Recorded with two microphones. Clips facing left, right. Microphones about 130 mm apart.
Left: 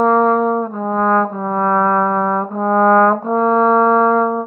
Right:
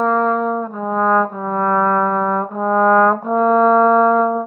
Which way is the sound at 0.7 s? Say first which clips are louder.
Left 1 dB; centre (ahead or behind).